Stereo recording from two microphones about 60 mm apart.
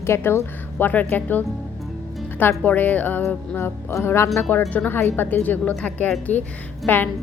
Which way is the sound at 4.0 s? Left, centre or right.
Left.